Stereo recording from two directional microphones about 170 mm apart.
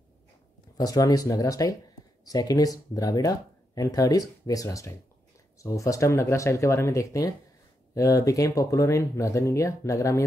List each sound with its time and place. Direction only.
0.7 s speech: 20° left (ahead or behind)